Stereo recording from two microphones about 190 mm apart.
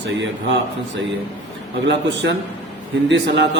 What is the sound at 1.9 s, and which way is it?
A man's voice, 65° right (ahead or behind).